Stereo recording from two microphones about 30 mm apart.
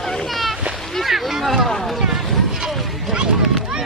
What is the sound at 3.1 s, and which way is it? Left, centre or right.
Run, right.